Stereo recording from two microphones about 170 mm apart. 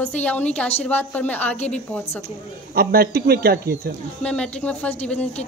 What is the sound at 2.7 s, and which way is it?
Speech, 65° right (ahead or behind).